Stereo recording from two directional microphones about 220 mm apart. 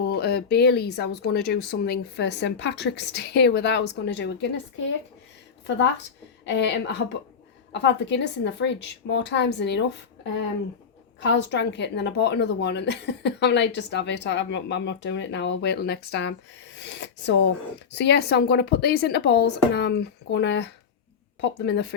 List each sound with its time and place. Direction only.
0.0 s speech: 45° left (ahead or behind)
5.6 s speech: 55° left (ahead or behind)
11.2 s speech: 50° left (ahead or behind)
16.7 s a sound: 55° left (ahead or behind)
17.9 s speech: 50° left (ahead or behind)